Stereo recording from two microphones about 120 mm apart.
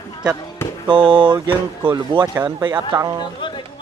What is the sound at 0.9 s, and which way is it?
Speech, 45° right (ahead or behind).